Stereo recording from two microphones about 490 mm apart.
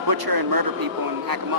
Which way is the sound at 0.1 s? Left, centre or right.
Right.